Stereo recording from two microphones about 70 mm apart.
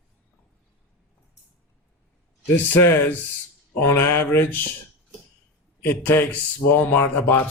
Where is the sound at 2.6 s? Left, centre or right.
Left.